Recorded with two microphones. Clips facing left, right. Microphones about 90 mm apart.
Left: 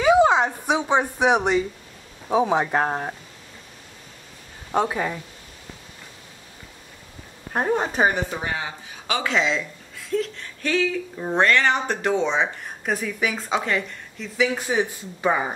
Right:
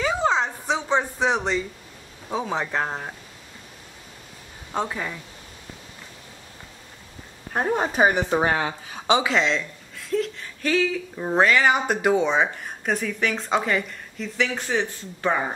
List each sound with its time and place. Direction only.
0.0 s a sound: 15° left (ahead or behind)
2.3 s speech: 15° left (ahead or behind)
4.7 s speech: 20° left (ahead or behind)
7.7 s speech: 5° right (ahead or behind)
8.4 s speech: 55° right (ahead or behind)
9.2 s speech: centre (ahead or behind)